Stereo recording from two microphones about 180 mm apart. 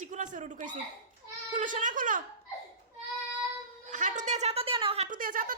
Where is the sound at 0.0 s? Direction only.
45° right (ahead or behind).